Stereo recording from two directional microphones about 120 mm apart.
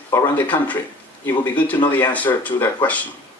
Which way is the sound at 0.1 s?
15° left (ahead or behind).